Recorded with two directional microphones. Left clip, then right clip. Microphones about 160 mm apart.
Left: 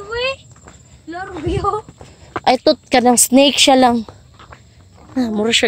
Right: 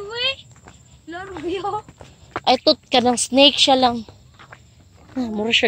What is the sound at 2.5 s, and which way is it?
Speech, 45° left (ahead or behind).